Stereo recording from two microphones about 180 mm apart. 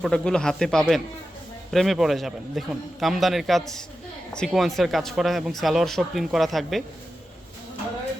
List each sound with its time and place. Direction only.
0.0 s speech: 5° left (ahead or behind)